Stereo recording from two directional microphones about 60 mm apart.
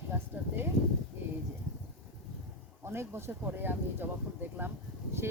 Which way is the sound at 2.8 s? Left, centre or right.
Right.